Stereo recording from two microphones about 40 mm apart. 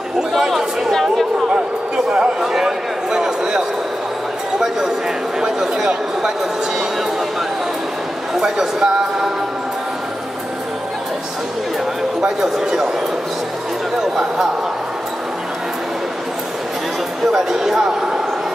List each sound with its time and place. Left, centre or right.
0.3 s chatter: centre
2.0 s a sound: right
2.4 s a sound: centre
8.4 s speech: centre
12.2 s speech: centre
13.9 s speech: centre
17.3 s speech: centre